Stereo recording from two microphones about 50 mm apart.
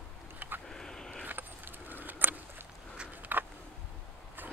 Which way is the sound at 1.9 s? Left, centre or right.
Right.